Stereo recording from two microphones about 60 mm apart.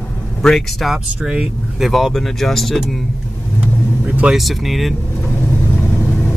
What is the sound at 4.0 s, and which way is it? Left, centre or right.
Vehicle, right.